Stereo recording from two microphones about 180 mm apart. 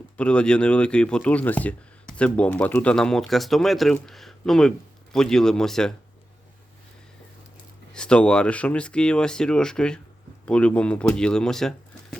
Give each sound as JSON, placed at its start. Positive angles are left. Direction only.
{"t": 0.2, "sound": "speech", "side_deg": 5}
{"t": 7.9, "sound": "speech", "side_deg": 5}